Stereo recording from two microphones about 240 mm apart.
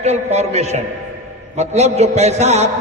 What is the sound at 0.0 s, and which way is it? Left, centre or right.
A man's voice, right.